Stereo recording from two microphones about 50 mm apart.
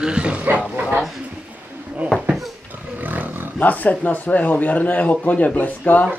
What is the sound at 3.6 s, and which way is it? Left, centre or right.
A man's voice, left.